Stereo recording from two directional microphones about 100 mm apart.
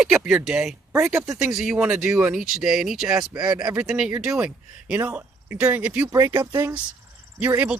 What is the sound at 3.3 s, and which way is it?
Speech, 40° right (ahead or behind).